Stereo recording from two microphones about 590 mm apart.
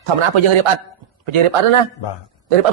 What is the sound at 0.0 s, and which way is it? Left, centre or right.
A man's voice, right.